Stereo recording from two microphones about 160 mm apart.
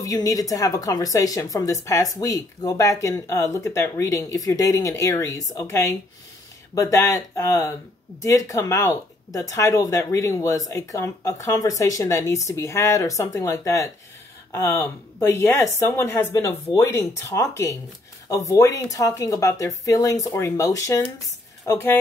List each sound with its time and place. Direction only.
0.0 s speech: 20° left (ahead or behind)